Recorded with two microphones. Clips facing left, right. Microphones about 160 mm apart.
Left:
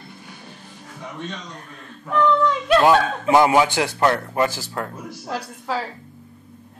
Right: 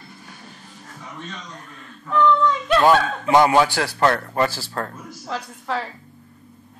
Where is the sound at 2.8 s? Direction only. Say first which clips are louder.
Even; 10° left (ahead or behind).